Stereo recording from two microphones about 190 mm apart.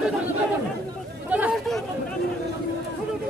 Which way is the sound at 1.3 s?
5° right (ahead or behind).